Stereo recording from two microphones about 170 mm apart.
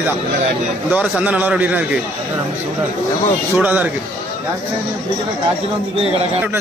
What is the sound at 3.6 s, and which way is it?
Speech, 5° right (ahead or behind).